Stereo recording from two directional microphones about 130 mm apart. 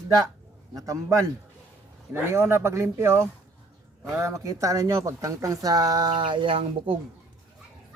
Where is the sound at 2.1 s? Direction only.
20° right (ahead or behind); by 6.9 s 45° right (ahead or behind).